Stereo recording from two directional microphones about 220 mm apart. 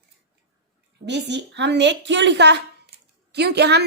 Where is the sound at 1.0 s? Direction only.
50° right (ahead or behind).